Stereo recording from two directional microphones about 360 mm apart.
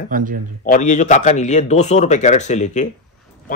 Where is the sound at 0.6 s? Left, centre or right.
Centre.